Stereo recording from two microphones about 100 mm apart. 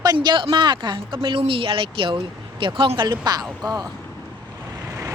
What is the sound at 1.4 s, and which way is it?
Speech, 65° right (ahead or behind).